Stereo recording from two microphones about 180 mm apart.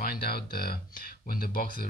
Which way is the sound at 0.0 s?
60° left (ahead or behind).